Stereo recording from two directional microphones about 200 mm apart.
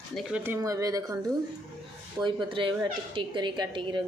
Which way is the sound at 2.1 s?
25° right (ahead or behind).